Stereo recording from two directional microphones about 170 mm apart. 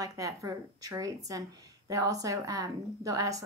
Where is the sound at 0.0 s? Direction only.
20° right (ahead or behind).